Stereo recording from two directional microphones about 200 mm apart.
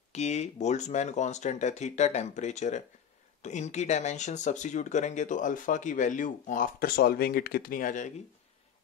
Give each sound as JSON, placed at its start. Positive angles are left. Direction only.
{"t": 0.1, "sound": "speech", "side_deg": 35}